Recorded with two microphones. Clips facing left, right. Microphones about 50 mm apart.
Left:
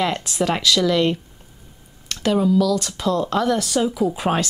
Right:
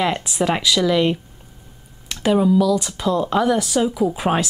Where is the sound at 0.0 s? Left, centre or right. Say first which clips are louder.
Right 1 dB; centre.